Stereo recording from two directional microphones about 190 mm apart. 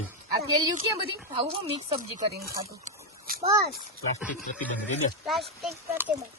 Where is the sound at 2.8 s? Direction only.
50° right (ahead or behind).